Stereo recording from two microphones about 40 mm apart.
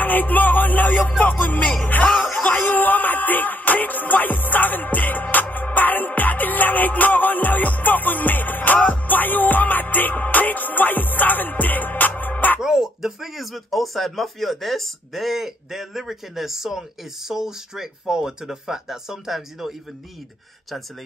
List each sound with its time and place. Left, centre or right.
0.0 s speech: left
1.9 s a sound: left
8.7 s music: left
12.5 s speech: centre